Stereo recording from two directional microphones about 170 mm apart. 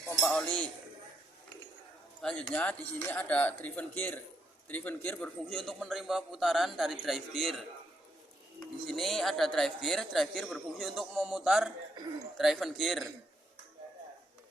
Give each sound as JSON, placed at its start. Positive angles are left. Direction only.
{"t": 0.2, "sound": "music", "side_deg": 5}
{"t": 2.2, "sound": "a man's voice", "side_deg": 10}
{"t": 8.9, "sound": "a man's voice", "side_deg": 0}